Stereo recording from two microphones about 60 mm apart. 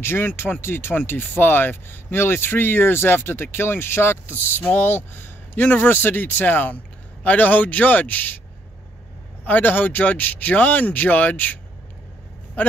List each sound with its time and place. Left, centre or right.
0.0 s speech: left
9.4 s speech: left